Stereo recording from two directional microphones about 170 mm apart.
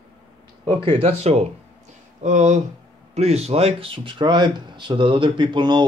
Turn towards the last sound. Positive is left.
turn(degrees=-25)  # may be behind; listen again after turning